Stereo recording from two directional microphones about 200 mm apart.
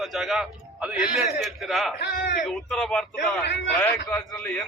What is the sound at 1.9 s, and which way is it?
Speech, 55° left (ahead or behind).